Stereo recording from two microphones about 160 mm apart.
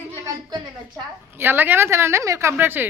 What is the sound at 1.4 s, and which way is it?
A woman's voice, 15° right (ahead or behind).